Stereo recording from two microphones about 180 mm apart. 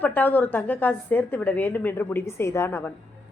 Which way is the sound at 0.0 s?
10° left (ahead or behind).